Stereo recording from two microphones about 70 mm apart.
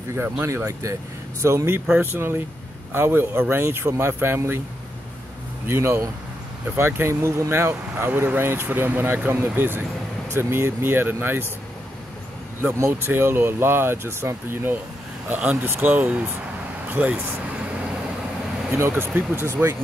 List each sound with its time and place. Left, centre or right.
0.1 s speech: right
1.9 s speech: right
5.7 s speech: right
12.7 s speech: right
18.7 s speech: right